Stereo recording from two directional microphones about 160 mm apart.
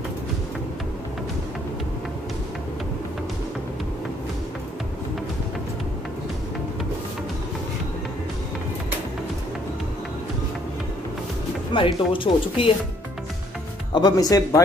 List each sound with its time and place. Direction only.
11.7 s speech: 30° left (ahead or behind)
13.9 s speech: 25° left (ahead or behind)